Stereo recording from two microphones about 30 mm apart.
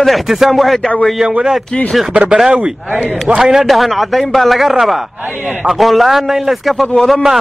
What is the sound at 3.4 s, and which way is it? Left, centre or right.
Speech, centre.